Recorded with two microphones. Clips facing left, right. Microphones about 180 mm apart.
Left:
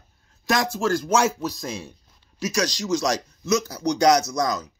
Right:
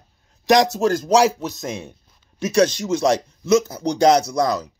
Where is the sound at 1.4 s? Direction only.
20° right (ahead or behind).